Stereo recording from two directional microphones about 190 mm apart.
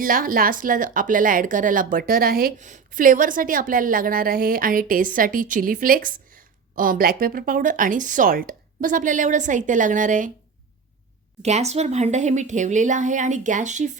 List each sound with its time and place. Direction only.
0.0 s speech: 45° right (ahead or behind)
11.4 s a woman's voice: 35° right (ahead or behind)